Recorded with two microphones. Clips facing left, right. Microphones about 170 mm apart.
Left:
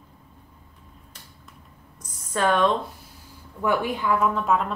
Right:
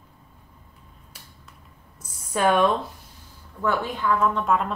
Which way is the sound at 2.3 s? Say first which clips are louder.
Right 1 dB; 10° right (ahead or behind).